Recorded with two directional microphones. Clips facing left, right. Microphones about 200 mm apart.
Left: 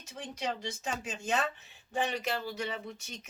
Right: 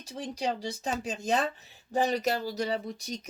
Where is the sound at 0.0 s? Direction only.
35° right (ahead or behind).